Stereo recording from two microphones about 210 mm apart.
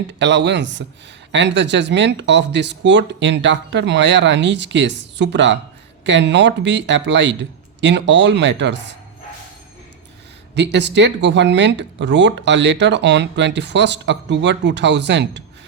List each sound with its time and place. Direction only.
0.2 s speech: 60° right (ahead or behind)
10.5 s speech: 55° right (ahead or behind)